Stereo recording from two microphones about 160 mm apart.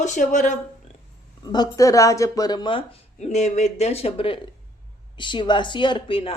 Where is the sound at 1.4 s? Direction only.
25° left (ahead or behind).